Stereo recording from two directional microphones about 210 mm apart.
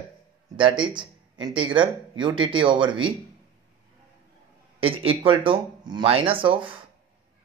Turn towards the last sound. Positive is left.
turn(degrees=-25)  # may be behind; listen again after turning